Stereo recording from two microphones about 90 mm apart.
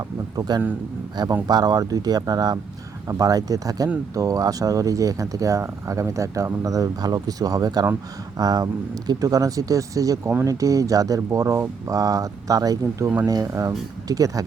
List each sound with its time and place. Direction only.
0.3 s speech: 50° right (ahead or behind)